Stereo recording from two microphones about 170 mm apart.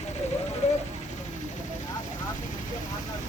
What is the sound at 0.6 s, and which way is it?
Vehicle, 40° left (ahead or behind).